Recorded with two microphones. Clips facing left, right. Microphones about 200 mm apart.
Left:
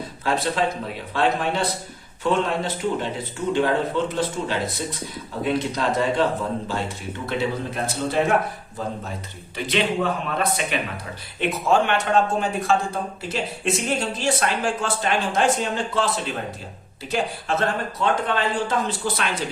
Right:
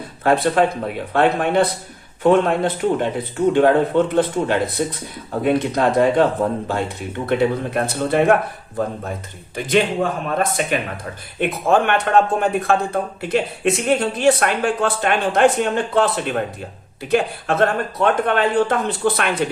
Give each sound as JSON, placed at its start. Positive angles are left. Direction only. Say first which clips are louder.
{"t": 0.3, "sound": "speech", "louder": "right 7 dB", "side_deg": -55}
{"t": 9.6, "sound": "a man's voice", "louder": "right 5 dB", "side_deg": -45}